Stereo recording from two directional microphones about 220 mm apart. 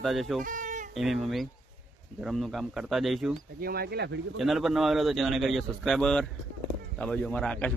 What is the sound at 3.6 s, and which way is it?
Speech, 45° right (ahead or behind).